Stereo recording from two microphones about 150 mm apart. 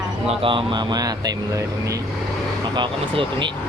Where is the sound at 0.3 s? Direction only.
35° right (ahead or behind).